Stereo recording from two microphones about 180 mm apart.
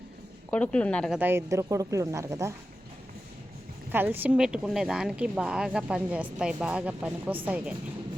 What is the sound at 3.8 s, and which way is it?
Speech, 10° right (ahead or behind).